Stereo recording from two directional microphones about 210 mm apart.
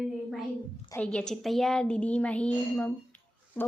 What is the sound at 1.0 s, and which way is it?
A woman's voice, 5° left (ahead or behind).